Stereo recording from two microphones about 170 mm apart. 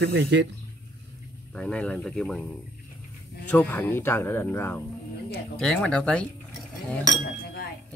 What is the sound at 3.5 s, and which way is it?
Speech, 10° left (ahead or behind).